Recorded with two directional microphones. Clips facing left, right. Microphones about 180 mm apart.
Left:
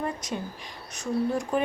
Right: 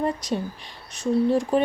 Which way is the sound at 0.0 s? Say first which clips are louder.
Right 6 dB; 35° right (ahead or behind).